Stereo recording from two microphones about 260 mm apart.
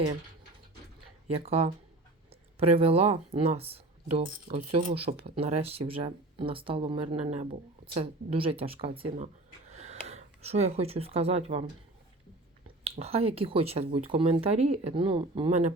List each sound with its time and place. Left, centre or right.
1.3 s speech: right
12.8 s speech: right